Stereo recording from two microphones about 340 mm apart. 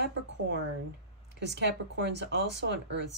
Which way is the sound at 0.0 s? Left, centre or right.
Right.